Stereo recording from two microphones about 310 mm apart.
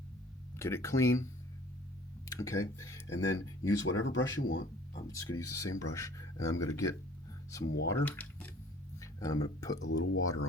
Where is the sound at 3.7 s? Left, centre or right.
Left.